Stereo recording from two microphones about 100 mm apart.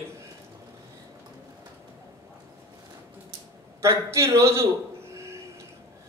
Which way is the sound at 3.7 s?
30° right (ahead or behind).